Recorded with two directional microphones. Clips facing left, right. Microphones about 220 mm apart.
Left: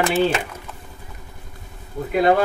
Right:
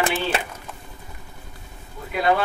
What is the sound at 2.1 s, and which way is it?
Speech, 45° left (ahead or behind).